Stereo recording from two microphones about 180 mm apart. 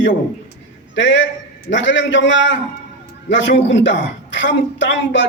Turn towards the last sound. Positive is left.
turn(degrees=90)